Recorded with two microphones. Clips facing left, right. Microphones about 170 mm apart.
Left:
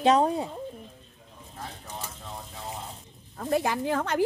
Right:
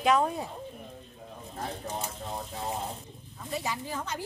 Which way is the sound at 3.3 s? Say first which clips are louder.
Left 8 dB; 60° left (ahead or behind).